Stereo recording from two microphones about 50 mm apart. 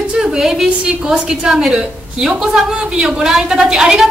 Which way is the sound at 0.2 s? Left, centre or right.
Centre.